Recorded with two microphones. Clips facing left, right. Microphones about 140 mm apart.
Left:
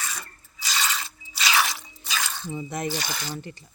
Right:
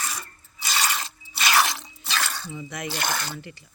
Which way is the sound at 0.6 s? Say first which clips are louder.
Right 2 dB; 60° right (ahead or behind).